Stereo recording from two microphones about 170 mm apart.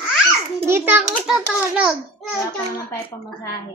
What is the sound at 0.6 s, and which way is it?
A child's voice, 10° right (ahead or behind).